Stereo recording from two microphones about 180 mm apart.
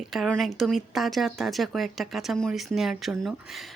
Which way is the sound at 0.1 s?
Centre (ahead or behind).